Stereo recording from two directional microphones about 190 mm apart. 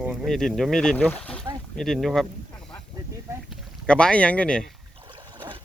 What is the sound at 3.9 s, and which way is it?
Speech, 5° left (ahead or behind).